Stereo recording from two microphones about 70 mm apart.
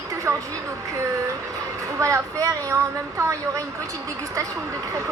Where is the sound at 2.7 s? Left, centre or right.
Right.